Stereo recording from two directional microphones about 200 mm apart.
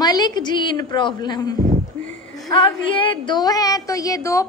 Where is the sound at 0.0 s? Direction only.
20° left (ahead or behind).